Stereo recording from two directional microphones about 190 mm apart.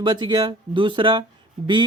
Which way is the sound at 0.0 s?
25° right (ahead or behind).